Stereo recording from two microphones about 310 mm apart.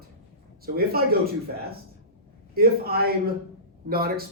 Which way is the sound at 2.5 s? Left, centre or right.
Right.